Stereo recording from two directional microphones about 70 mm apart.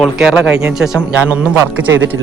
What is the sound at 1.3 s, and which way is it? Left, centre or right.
Speech, right.